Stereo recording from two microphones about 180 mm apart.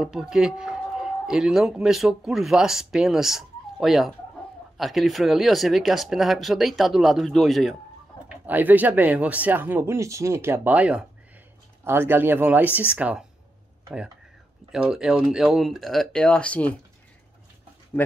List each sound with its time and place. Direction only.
0.0 s speech: 5° right (ahead or behind)
14.7 s speech: 5° right (ahead or behind)
18.0 s speech: 10° left (ahead or behind)